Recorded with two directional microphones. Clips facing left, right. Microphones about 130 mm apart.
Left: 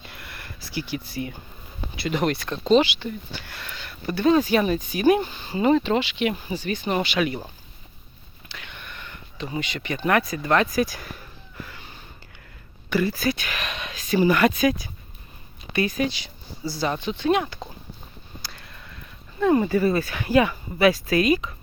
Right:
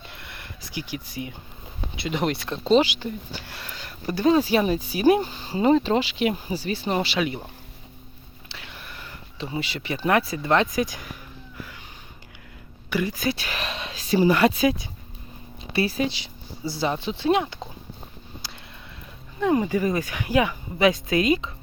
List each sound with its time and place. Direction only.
0.1 s a sound: 20° right (ahead or behind)
2.0 s speech: 25° right (ahead or behind)
2.3 s speech: centre (ahead or behind)
2.7 s speech: 35° right (ahead or behind)
4.4 s speech: 25° right (ahead or behind)
5.3 s speech: 35° right (ahead or behind)
8.4 s a sound: 30° right (ahead or behind)
9.6 s speech: 30° right (ahead or behind); by 11.9 s 10° right (ahead or behind)
12.9 s speech: 15° right (ahead or behind)
13.3 s speech: 30° right (ahead or behind)
19.4 s speech: 15° right (ahead or behind)